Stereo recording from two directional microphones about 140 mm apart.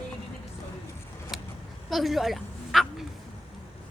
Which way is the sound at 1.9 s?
Centre (ahead or behind).